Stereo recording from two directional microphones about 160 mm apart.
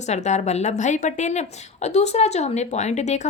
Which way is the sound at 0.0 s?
45° left (ahead or behind).